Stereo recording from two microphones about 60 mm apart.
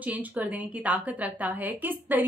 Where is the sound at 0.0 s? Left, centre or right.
Right.